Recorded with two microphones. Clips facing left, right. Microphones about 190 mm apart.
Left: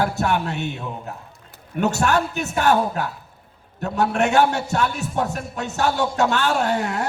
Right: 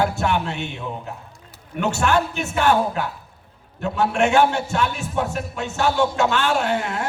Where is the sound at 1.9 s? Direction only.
40° left (ahead or behind).